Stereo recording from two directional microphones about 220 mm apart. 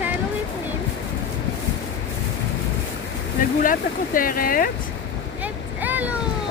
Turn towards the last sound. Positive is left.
turn(degrees=-5)  # may be behind; listen again after turning